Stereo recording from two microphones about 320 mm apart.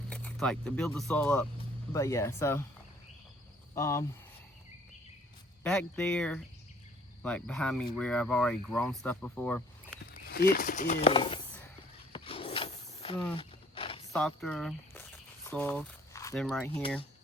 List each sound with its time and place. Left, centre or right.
0.1 s speech: centre
3.8 s speech: centre
5.6 s speech: centre
10.1 s speech: left
12.1 s a sound: centre
14.1 s speech: centre